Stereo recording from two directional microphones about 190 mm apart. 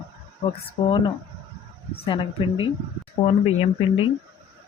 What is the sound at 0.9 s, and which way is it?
Speech, 25° left (ahead or behind).